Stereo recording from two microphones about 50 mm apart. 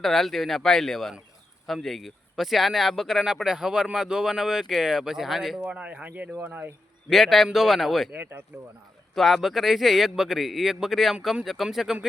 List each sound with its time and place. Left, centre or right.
0.0 s speech: centre
5.6 s a man's voice: right
7.1 s speech: centre
8.5 s a man's voice: right
9.1 s speech: centre